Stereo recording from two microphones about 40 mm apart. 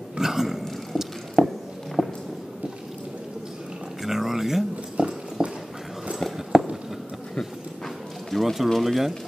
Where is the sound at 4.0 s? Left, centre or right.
Centre.